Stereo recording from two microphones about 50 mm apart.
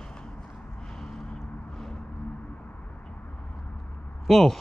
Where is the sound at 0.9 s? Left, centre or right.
Centre.